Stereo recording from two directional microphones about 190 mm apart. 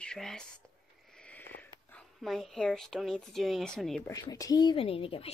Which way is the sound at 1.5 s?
5° left (ahead or behind).